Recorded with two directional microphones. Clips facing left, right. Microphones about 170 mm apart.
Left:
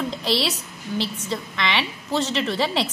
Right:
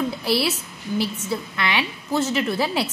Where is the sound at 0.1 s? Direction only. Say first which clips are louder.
Right 2 dB; 10° right (ahead or behind).